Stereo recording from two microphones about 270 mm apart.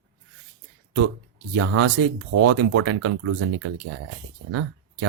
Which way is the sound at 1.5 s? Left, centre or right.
Right.